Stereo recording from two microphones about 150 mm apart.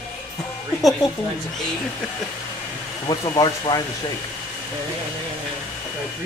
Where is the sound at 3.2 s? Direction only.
25° left (ahead or behind).